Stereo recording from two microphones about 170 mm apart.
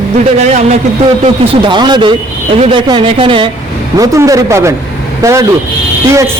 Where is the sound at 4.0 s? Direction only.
20° right (ahead or behind).